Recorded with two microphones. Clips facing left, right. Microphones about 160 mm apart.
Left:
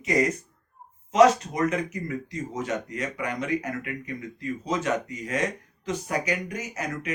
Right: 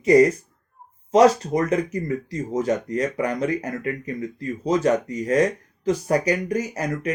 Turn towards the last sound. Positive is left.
turn(degrees=-35)  # may be behind; listen again after turning